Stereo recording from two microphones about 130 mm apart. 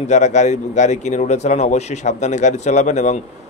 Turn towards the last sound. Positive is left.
turn(degrees=65)  # may be behind; listen again after turning